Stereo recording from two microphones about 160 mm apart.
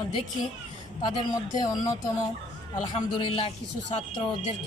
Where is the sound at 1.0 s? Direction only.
25° left (ahead or behind).